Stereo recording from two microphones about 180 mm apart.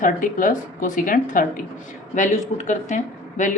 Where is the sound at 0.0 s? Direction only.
50° left (ahead or behind).